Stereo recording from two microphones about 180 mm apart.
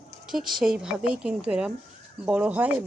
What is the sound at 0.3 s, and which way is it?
Speech, centre (ahead or behind).